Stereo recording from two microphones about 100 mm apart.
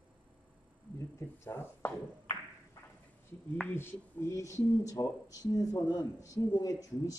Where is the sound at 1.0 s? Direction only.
25° left (ahead or behind).